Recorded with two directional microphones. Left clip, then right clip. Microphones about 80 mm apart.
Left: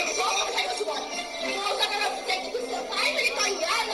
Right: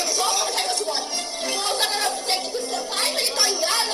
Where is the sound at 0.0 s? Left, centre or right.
Right.